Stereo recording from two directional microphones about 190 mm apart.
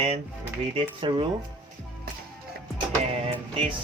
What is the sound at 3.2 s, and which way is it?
Vehicle, 30° right (ahead or behind).